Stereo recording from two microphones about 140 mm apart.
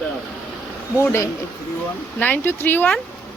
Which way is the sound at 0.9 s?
20° left (ahead or behind).